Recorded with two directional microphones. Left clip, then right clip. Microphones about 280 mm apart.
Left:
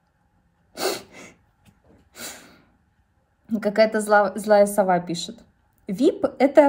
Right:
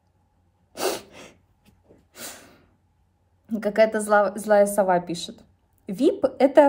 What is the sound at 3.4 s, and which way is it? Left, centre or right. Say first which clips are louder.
A woman's voice: left 1 dB; centre.